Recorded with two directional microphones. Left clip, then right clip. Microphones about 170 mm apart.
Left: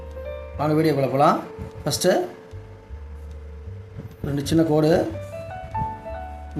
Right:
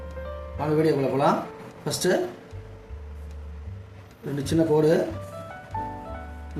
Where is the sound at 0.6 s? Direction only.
55° left (ahead or behind).